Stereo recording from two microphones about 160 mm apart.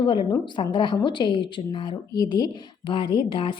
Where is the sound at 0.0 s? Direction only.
30° left (ahead or behind).